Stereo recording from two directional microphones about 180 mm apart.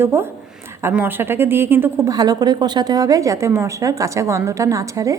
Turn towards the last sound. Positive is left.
turn(degrees=-20)  # may be behind; listen again after turning